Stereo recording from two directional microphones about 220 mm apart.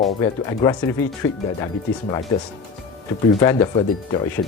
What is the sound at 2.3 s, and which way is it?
Speech, 15° left (ahead or behind).